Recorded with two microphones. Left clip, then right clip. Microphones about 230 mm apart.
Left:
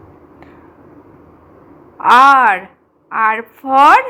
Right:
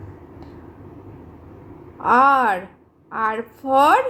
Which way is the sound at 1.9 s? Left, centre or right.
Centre.